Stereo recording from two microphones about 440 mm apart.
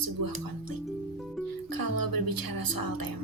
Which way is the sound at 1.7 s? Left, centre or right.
Right.